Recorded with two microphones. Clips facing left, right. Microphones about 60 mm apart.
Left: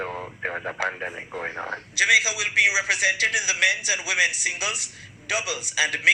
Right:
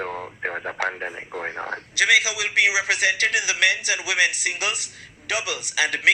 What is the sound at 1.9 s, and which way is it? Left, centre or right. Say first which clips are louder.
Speech: right 1 dB; right.